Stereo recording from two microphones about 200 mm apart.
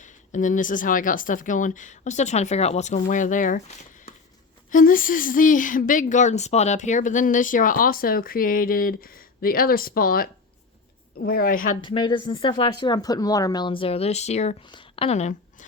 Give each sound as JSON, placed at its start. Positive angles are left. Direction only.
{"t": 0.0, "sound": "speech", "side_deg": 40}
{"t": 4.7, "sound": "speech", "side_deg": 45}
{"t": 11.8, "sound": "speech", "side_deg": 25}